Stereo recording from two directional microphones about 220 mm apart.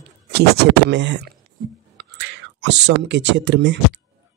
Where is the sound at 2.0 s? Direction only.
50° right (ahead or behind).